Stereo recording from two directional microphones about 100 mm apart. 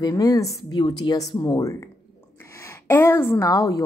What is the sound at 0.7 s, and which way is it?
A woman's voice, 45° left (ahead or behind).